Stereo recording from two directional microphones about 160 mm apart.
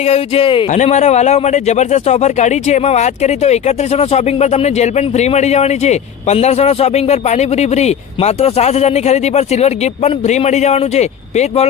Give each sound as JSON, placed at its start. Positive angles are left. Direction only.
{"t": 0.0, "sound": "speech", "side_deg": 40}
{"t": 0.7, "sound": "a man's voice", "side_deg": 50}